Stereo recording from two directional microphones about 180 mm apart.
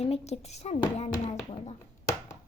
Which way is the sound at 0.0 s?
35° left (ahead or behind).